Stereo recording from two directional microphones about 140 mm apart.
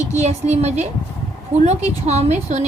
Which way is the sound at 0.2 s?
50° right (ahead or behind).